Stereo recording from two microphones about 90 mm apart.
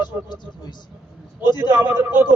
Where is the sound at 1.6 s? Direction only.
30° right (ahead or behind).